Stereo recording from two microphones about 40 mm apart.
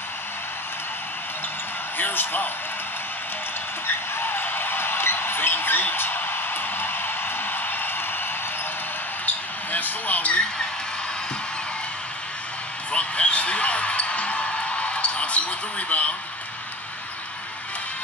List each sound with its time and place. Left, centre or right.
2.0 s a man's voice: left
3.8 s music: left
9.2 s a sound: left
12.9 s basketball bounce: left